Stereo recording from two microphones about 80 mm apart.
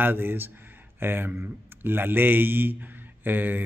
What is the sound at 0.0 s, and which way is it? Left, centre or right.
Speech, right.